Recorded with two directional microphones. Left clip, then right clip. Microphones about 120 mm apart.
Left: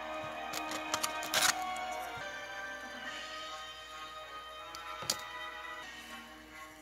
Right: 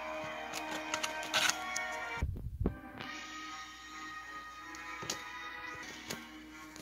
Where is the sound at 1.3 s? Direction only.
30° left (ahead or behind).